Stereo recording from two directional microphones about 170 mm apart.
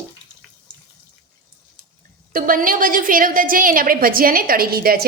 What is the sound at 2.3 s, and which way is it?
A woman's voice, 55° right (ahead or behind).